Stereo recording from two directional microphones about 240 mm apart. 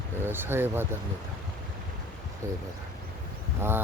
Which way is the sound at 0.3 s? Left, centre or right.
Centre.